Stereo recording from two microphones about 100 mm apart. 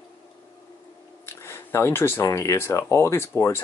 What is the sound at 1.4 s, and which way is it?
Speech, 25° left (ahead or behind).